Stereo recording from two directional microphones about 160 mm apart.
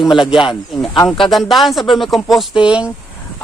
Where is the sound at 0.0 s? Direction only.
Centre (ahead or behind).